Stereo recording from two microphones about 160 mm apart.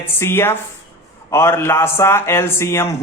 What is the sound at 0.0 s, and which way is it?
A man's voice, 15° left (ahead or behind).